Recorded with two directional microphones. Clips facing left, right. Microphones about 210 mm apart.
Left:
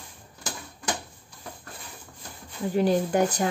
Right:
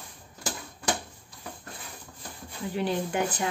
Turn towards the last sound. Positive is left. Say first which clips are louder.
# left 5 dB
turn(degrees=40)  # may be behind; listen again after turning